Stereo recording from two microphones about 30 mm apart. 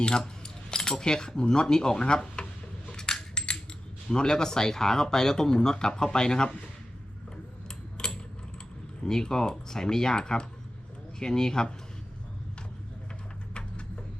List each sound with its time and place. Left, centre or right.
0.4 s speech: left
2.9 s coin: left
4.1 s speech: left
7.9 s typing: left
9.0 s speech: left
13.5 s a sound: left